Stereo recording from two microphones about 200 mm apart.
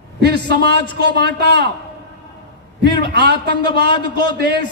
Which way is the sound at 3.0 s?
55° right (ahead or behind).